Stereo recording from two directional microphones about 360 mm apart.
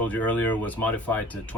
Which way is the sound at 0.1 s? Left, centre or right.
Centre.